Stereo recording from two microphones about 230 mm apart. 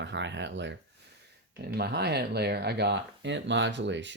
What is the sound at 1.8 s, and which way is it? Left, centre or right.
Speech, right.